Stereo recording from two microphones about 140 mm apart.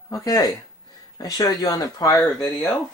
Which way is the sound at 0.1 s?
25° left (ahead or behind).